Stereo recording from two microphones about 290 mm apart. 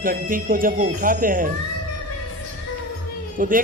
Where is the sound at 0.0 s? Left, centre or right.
Right.